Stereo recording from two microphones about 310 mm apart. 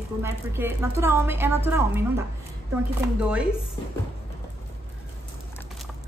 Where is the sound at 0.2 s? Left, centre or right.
Centre.